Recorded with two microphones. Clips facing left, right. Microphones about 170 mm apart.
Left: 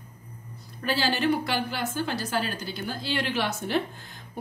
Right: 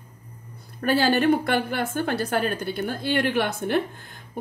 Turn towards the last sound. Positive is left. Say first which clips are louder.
# right 3 dB
turn(degrees=-50)  # may be behind; listen again after turning